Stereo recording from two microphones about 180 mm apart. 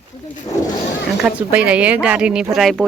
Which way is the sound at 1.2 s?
5° right (ahead or behind).